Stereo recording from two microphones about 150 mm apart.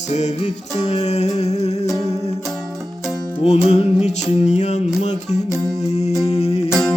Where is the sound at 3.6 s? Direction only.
45° left (ahead or behind).